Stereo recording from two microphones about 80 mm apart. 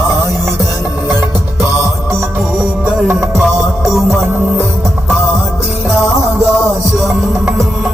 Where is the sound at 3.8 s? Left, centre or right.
Centre.